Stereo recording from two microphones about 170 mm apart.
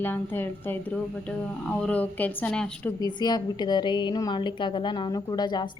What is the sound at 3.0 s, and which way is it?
A woman's voice, 25° left (ahead or behind).